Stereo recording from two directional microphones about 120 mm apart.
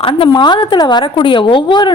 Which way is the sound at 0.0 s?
45° left (ahead or behind).